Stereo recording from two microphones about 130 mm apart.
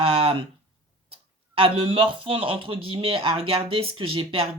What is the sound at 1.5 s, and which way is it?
Speech, 45° right (ahead or behind).